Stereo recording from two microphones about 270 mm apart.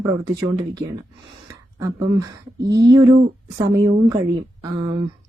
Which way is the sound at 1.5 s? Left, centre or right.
Centre.